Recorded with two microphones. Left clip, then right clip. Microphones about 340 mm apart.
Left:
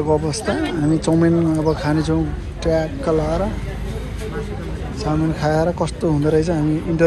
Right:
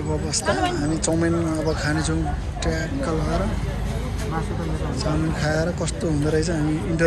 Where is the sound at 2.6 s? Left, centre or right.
Centre.